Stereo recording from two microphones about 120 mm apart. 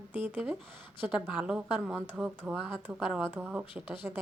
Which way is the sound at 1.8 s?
5° left (ahead or behind).